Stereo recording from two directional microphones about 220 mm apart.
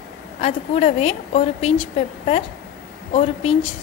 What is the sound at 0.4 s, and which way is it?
A woman's voice, 30° left (ahead or behind).